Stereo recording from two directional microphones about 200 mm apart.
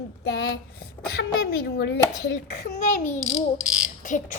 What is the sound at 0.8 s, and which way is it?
Speech, 50° left (ahead or behind).